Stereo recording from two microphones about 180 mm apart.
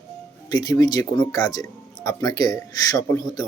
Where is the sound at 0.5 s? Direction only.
20° left (ahead or behind).